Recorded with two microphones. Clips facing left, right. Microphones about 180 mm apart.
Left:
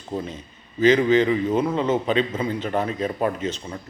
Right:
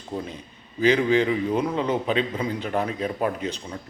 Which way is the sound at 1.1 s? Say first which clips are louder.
Left 3 dB; 10° right (ahead or behind).